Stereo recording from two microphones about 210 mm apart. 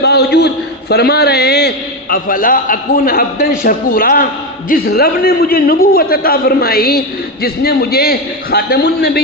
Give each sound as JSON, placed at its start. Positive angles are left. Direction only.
{"t": 0.0, "sound": "a man's voice", "side_deg": 50}